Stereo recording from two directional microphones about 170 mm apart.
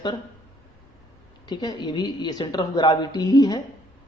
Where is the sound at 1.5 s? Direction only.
25° left (ahead or behind).